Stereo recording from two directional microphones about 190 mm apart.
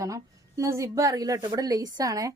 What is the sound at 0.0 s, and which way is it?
A woman's voice, 15° right (ahead or behind).